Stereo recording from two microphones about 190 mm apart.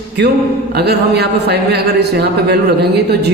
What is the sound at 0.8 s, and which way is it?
Speech, 60° right (ahead or behind).